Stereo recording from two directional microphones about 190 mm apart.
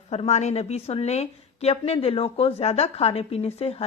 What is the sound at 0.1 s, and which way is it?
A woman's voice, 35° left (ahead or behind).